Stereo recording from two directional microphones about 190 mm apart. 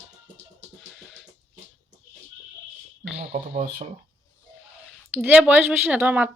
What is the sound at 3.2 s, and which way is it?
Speech, 30° right (ahead or behind).